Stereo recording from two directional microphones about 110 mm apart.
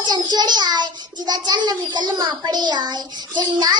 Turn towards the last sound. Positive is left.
turn(degrees=-40)  # may be behind; listen again after turning